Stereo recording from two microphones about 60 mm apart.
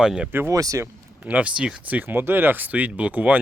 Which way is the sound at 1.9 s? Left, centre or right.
Right.